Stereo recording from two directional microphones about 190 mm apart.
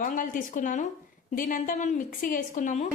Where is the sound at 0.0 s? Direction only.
45° left (ahead or behind).